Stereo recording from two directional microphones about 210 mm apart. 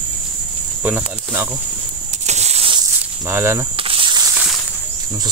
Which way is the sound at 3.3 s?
10° right (ahead or behind).